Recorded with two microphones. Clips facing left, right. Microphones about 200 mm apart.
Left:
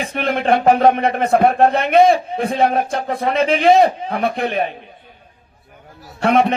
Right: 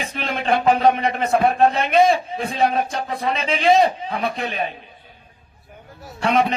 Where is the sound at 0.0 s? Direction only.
55° left (ahead or behind).